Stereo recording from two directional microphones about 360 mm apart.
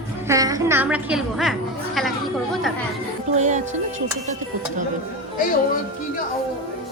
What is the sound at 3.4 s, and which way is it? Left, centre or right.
Music, centre.